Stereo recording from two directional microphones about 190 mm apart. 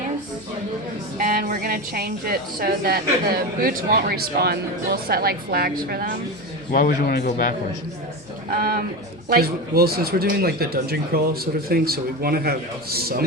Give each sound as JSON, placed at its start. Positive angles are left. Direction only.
{"t": 1.2, "sound": "speech", "side_deg": -45}
{"t": 6.7, "sound": "speech", "side_deg": 50}
{"t": 8.5, "sound": "speech", "side_deg": -50}